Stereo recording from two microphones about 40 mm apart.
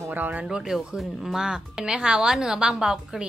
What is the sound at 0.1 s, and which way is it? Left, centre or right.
Speech, right.